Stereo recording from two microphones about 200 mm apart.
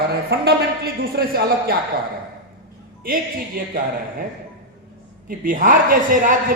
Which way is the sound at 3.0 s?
45° right (ahead or behind).